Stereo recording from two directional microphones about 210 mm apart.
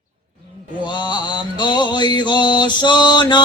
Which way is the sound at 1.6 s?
20° left (ahead or behind).